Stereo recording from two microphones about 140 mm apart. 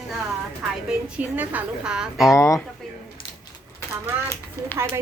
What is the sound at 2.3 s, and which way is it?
Speech, 20° left (ahead or behind).